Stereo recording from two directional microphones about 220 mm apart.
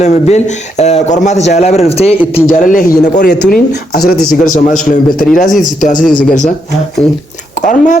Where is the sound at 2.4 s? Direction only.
35° left (ahead or behind).